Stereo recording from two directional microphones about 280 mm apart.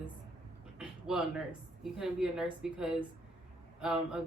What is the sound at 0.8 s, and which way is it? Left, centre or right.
A woman's voice, centre.